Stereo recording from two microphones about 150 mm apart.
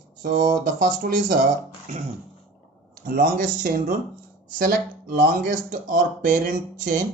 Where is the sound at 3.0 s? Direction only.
70° right (ahead or behind).